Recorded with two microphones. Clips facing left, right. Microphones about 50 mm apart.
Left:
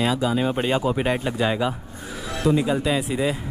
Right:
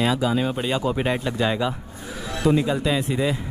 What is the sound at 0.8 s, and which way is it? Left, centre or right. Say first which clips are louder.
Speech: left 1 dB; centre.